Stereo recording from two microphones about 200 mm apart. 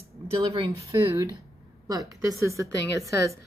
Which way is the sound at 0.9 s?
15° right (ahead or behind).